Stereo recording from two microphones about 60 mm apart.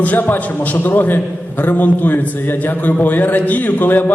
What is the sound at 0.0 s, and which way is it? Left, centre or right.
A man's voice, left.